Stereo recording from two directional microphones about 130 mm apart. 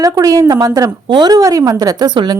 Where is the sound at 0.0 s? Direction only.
25° right (ahead or behind).